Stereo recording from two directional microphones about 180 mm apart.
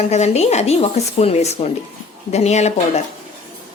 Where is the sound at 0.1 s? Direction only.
35° left (ahead or behind).